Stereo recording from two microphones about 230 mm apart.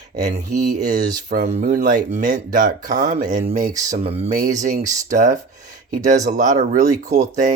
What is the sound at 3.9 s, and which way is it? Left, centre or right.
Speech, right.